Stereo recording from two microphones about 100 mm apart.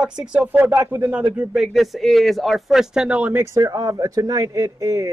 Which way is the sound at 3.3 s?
30° right (ahead or behind).